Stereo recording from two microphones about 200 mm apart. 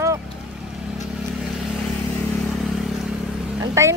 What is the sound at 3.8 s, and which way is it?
Speech, 15° right (ahead or behind).